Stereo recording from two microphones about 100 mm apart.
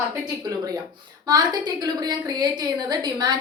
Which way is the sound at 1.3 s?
45° right (ahead or behind).